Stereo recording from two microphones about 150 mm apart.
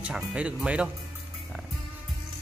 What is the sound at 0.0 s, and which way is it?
Speech, 10° right (ahead or behind).